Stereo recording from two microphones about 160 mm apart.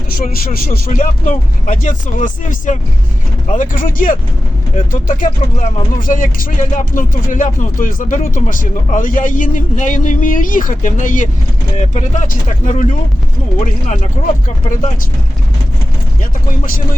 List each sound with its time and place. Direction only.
0.5 s speech: 65° left (ahead or behind)